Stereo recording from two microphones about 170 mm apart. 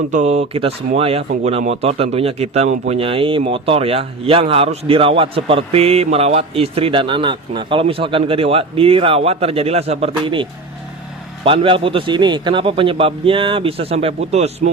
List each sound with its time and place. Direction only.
0.1 s speech: 45° right (ahead or behind)
11.4 s speech: 30° right (ahead or behind)